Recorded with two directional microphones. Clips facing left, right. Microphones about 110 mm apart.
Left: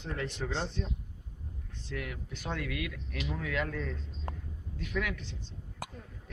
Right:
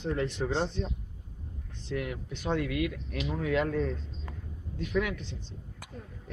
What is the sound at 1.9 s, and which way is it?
A man's voice, 25° right (ahead or behind).